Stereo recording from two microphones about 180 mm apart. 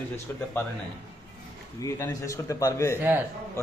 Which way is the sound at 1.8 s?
15° left (ahead or behind).